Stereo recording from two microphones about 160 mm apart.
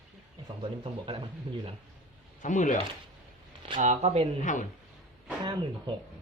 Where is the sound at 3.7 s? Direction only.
45° right (ahead or behind).